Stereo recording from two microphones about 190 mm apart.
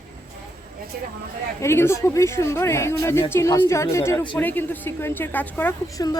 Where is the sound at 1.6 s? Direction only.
15° left (ahead or behind).